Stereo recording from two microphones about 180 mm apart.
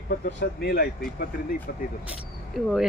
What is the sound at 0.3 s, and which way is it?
Speech, 60° left (ahead or behind).